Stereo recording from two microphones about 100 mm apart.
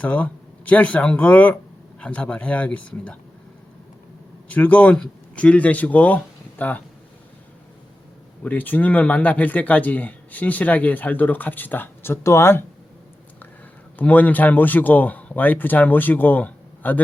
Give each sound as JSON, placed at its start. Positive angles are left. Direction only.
{"t": 0.0, "sound": "speech", "side_deg": 15}
{"t": 4.4, "sound": "speech", "side_deg": 15}
{"t": 8.4, "sound": "speech", "side_deg": 15}
{"t": 14.0, "sound": "speech", "side_deg": 15}